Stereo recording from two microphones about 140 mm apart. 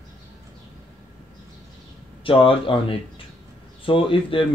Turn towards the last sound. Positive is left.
turn(degrees=40)  # may be behind; listen again after turning